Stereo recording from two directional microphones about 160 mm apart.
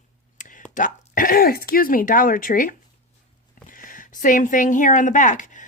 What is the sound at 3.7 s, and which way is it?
Speech, 60° left (ahead or behind).